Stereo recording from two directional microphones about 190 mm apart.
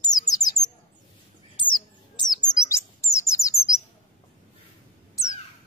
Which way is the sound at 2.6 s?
15° left (ahead or behind).